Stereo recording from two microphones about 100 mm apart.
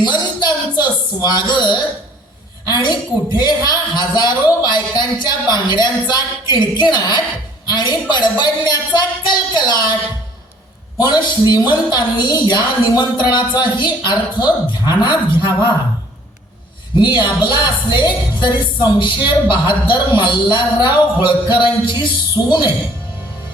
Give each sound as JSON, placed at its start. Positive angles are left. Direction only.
{"t": 0.0, "sound": "music", "side_deg": 45}
{"t": 2.6, "sound": "speech", "side_deg": 50}
{"t": 10.9, "sound": "speech", "side_deg": 45}
{"t": 17.2, "sound": "speech", "side_deg": 55}